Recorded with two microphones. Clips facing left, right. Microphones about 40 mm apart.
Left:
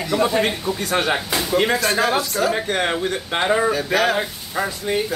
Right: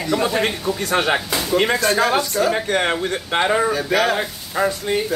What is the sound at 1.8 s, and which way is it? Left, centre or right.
Speech, centre.